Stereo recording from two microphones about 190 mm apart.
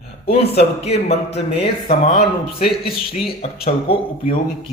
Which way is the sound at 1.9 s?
50° left (ahead or behind).